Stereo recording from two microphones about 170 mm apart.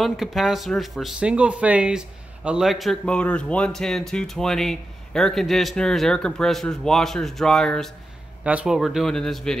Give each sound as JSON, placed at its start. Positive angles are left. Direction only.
{"t": 0.0, "sound": "speech", "side_deg": 0}